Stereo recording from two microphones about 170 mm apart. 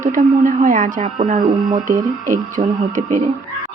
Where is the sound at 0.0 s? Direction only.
50° right (ahead or behind).